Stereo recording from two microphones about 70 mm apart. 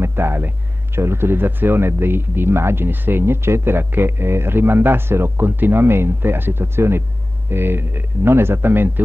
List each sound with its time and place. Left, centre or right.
0.0 s speech: right